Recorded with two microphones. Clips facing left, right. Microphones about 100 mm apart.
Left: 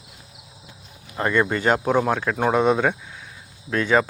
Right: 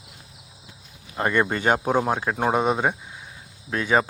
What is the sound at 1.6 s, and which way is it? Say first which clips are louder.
Speech: left 2 dB; 20° right (ahead or behind).